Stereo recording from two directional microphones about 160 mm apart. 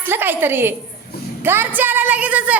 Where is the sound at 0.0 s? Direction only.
10° right (ahead or behind).